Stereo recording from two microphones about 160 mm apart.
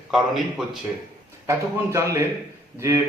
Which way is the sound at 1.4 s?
20° right (ahead or behind).